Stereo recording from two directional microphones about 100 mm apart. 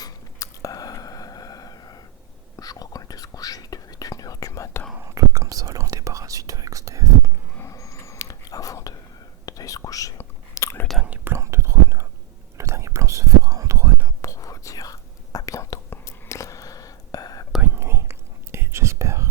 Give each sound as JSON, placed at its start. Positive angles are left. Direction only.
{"t": 0.0, "sound": "a sound", "side_deg": 35}
{"t": 2.6, "sound": "whispering", "side_deg": 40}
{"t": 4.9, "sound": "whispering", "side_deg": -30}
{"t": 7.6, "sound": "whispering", "side_deg": 30}
{"t": 10.2, "sound": "chewing", "side_deg": 30}
{"t": 11.0, "sound": "whispering", "side_deg": -15}
{"t": 11.3, "sound": "whispering", "side_deg": -30}
{"t": 14.2, "sound": "whispering", "side_deg": 35}
{"t": 17.6, "sound": "whispering", "side_deg": -25}